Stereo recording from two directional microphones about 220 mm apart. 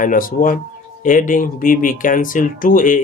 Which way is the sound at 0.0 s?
40° left (ahead or behind).